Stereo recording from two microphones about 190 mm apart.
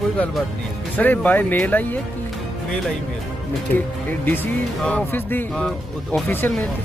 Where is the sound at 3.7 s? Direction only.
10° left (ahead or behind).